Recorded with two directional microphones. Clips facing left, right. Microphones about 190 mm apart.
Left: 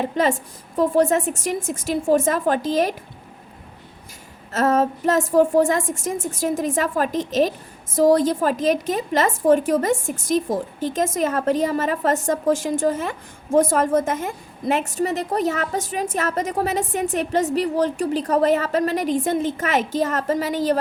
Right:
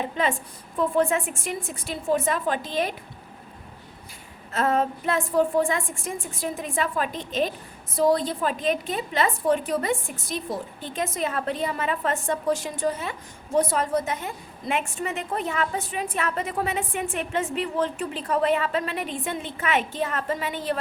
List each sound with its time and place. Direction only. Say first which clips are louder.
0.2 s a woman's voice: left 6 dB; 40° left (ahead or behind)
4.5 s a woman's voice: left 5 dB; 40° left (ahead or behind)